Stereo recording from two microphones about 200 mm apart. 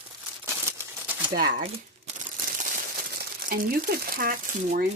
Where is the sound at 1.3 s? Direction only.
50° right (ahead or behind).